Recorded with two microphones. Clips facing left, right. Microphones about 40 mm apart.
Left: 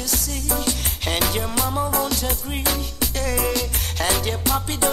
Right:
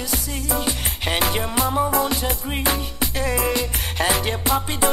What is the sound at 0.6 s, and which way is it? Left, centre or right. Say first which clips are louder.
Music: right 1 dB; centre.